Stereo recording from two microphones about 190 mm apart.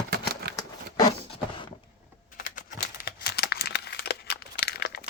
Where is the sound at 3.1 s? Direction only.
55° left (ahead or behind).